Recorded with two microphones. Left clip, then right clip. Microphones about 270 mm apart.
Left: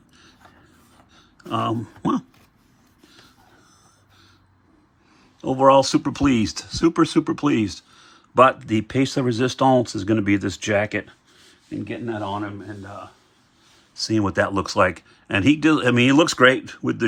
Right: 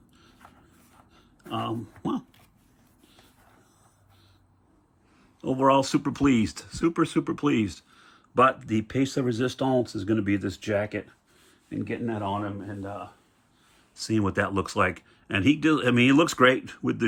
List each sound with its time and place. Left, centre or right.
1.5 s speech: left
2.0 s a sound: left
5.4 s speech: centre
11.9 s speech: centre
14.0 s speech: centre